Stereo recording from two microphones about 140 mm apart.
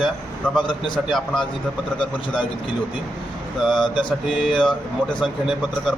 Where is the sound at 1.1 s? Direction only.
Centre (ahead or behind).